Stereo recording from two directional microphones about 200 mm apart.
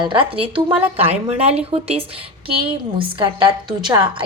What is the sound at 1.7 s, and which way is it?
Speech, 30° right (ahead or behind).